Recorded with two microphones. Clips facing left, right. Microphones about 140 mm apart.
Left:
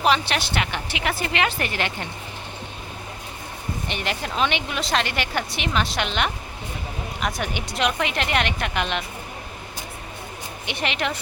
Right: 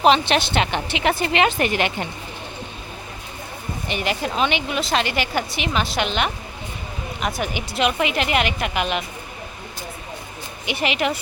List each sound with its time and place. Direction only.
0.0 s a woman's voice: 20° right (ahead or behind)
3.8 s a woman's voice: 5° right (ahead or behind)
10.7 s a woman's voice: 5° right (ahead or behind)